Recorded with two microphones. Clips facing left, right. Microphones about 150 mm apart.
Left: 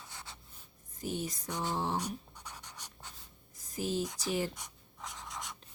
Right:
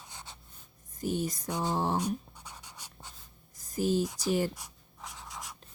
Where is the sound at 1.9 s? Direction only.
10° right (ahead or behind).